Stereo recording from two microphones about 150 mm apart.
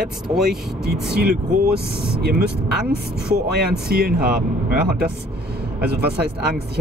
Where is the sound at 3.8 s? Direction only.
90° right.